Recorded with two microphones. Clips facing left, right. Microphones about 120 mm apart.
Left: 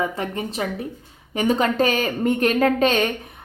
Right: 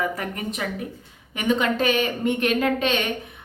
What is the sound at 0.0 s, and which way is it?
A woman's voice, 25° left (ahead or behind).